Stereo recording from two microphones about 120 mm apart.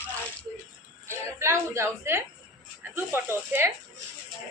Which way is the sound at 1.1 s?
25° right (ahead or behind).